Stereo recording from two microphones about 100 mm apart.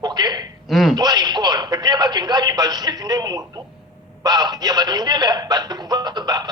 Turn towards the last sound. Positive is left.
turn(degrees=-45)  # may be behind; listen again after turning